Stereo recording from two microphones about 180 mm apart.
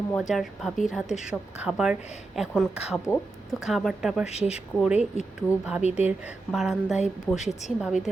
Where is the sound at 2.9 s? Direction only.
10° left (ahead or behind).